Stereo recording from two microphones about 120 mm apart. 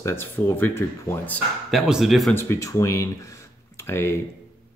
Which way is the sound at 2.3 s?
25° left (ahead or behind).